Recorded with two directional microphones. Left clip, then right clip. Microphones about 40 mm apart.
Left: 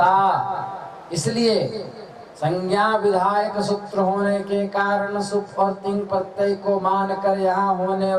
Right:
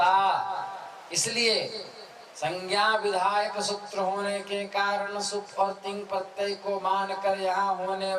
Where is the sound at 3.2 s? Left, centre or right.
Right.